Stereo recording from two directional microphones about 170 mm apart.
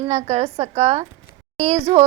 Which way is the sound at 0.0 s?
40° right (ahead or behind).